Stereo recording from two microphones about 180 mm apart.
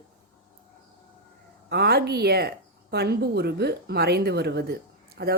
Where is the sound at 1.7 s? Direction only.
60° right (ahead or behind).